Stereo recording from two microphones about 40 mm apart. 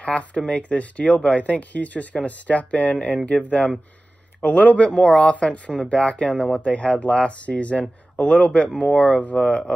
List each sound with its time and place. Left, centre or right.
0.0 s speech: left